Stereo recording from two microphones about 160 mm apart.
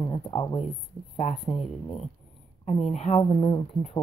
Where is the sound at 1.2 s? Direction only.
45° left (ahead or behind).